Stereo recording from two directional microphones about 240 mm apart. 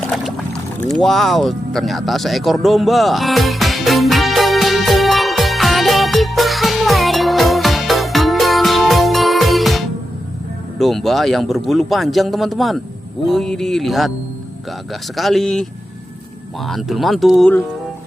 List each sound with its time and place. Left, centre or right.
0.0 s pour: centre
0.8 s music: centre
10.8 s speech: centre
15.1 s speech: centre
16.6 s speech: centre